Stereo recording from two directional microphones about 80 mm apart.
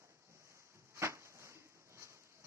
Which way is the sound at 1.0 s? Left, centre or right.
Right.